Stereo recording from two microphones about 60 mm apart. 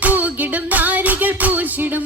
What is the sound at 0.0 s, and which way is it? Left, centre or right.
Music, right.